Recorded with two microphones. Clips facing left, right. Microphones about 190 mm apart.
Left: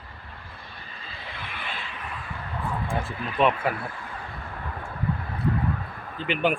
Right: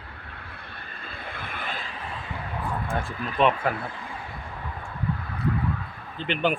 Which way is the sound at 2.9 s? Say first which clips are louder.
Even; centre (ahead or behind).